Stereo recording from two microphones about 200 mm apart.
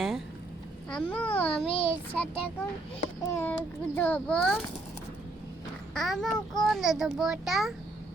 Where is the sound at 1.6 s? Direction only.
25° left (ahead or behind).